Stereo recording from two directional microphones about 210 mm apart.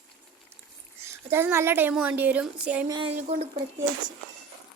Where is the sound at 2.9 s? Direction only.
25° right (ahead or behind).